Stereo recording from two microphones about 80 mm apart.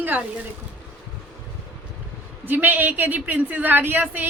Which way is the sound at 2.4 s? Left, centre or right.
Right.